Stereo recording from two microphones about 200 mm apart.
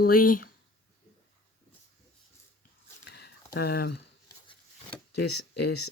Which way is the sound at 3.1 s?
55° left (ahead or behind).